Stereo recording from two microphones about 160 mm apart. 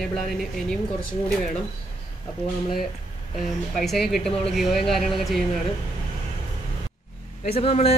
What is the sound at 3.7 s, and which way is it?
Speech, centre (ahead or behind).